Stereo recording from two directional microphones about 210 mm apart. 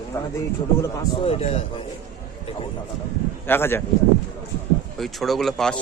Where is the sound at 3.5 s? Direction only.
10° left (ahead or behind).